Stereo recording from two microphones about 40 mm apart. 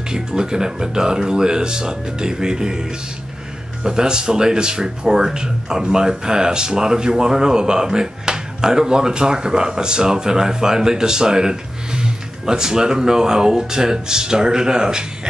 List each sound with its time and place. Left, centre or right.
0.1 s speech: centre